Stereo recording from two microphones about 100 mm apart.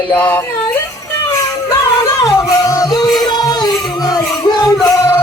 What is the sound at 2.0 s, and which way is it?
Music, 35° left (ahead or behind).